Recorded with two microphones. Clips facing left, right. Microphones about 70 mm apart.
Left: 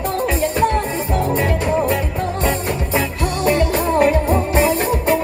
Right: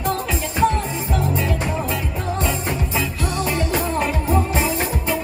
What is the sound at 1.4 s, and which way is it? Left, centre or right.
Music, left.